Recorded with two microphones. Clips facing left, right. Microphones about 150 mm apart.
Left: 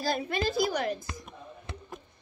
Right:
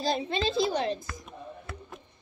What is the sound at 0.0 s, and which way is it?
Speech, 20° right (ahead or behind).